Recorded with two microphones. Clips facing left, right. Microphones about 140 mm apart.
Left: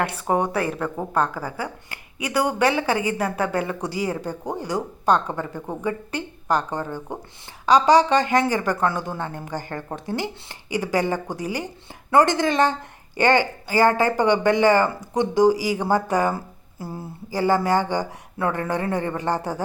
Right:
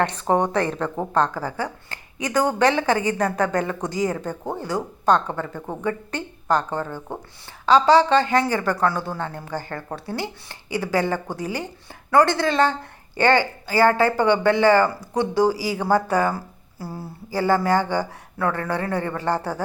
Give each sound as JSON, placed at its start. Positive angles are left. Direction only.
{"t": 0.0, "sound": "speech", "side_deg": 10}